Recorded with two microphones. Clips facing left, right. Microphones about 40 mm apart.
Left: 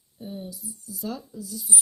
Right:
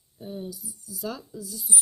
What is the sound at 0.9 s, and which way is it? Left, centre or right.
Speech, right.